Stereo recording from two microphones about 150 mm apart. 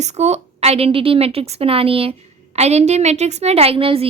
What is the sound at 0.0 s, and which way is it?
A woman's voice, 50° right (ahead or behind).